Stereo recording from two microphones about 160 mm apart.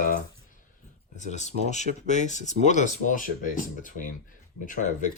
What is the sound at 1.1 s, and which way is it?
Speech, 45° left (ahead or behind).